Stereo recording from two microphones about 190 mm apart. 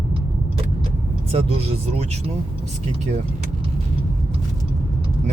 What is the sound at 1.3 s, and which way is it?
Speech, 30° right (ahead or behind).